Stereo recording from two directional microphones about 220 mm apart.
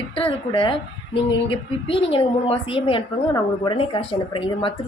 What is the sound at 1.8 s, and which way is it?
A woman's voice, 25° left (ahead or behind).